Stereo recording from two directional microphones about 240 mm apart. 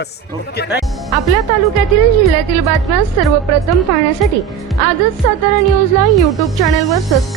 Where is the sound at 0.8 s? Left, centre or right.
Centre.